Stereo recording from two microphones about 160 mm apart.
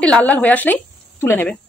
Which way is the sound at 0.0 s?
10° left (ahead or behind).